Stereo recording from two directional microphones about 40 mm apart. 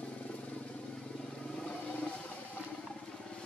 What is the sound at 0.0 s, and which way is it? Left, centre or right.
Vehicle, left.